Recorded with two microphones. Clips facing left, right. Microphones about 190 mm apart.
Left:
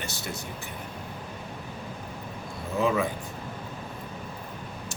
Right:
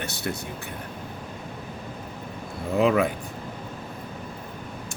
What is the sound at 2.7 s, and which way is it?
Speech, 65° right (ahead or behind).